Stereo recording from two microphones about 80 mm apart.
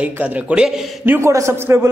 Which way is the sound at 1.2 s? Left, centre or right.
Right.